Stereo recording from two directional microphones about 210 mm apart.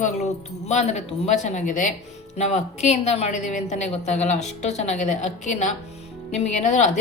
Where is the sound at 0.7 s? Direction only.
30° left (ahead or behind).